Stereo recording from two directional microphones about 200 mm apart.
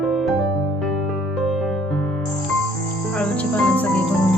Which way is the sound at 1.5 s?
Centre (ahead or behind).